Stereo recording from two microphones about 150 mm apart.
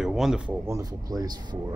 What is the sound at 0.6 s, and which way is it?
Speech, 20° right (ahead or behind).